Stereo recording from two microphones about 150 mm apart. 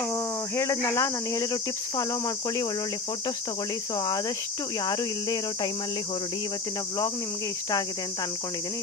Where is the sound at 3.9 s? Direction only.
25° left (ahead or behind).